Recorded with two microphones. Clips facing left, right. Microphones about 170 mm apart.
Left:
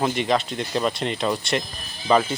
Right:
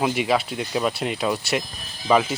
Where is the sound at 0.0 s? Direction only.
5° right (ahead or behind).